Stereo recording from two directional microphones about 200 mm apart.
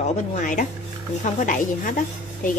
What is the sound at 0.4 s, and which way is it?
A woman's voice, 40° left (ahead or behind).